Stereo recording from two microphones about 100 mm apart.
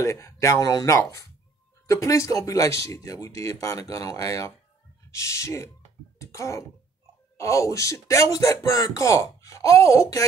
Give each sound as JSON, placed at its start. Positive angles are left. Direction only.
{"t": 0.0, "sound": "speech", "side_deg": 30}
{"t": 6.1, "sound": "throat clearing", "side_deg": 30}
{"t": 7.3, "sound": "speech", "side_deg": 30}